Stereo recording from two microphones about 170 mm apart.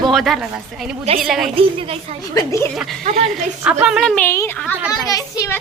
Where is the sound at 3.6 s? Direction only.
5° right (ahead or behind); by 5.6 s 20° left (ahead or behind).